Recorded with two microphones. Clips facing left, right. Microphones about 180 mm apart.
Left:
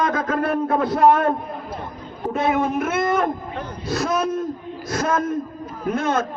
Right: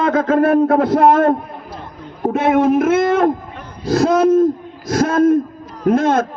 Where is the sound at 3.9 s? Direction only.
70° right (ahead or behind).